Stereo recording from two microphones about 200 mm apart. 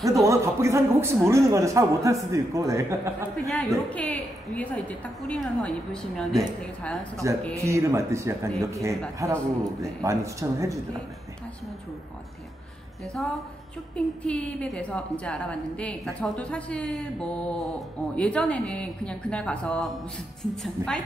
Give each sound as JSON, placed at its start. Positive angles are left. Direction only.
{"t": 0.0, "sound": "a man's voice", "side_deg": -15}
{"t": 3.4, "sound": "a woman's voice", "side_deg": 0}
{"t": 7.5, "sound": "a man's voice", "side_deg": -15}
{"t": 13.0, "sound": "a woman's voice", "side_deg": 0}